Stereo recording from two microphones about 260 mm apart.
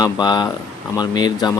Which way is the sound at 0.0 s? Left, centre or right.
Centre.